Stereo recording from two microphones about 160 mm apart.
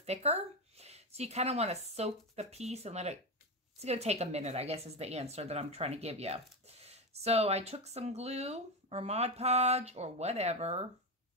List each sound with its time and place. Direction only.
0.0 s a woman's voice: 40° right (ahead or behind)